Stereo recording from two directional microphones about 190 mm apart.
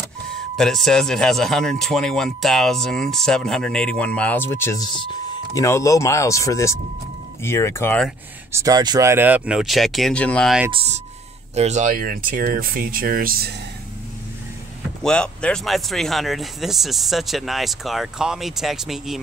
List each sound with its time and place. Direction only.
0.6 s speech: centre (ahead or behind)
8.5 s speech: 15° right (ahead or behind); by 10.6 s 5° left (ahead or behind)
10.7 s speech: 30° right (ahead or behind); by 13.5 s 50° right (ahead or behind)
15.0 s speech: 5° left (ahead or behind)